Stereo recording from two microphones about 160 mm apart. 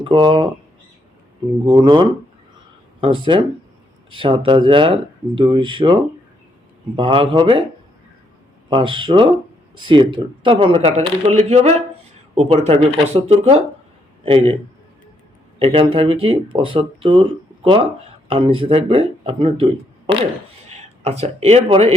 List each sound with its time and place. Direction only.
0.0 s speech: 30° right (ahead or behind)
1.6 s speech: 30° right (ahead or behind)
8.7 s speech: 30° right (ahead or behind)
15.5 s speech: 35° right (ahead or behind)